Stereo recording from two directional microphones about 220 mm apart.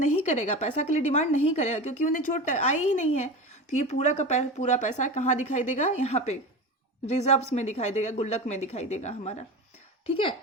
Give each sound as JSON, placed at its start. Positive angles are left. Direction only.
{"t": 0.0, "sound": "a woman's voice", "side_deg": 30}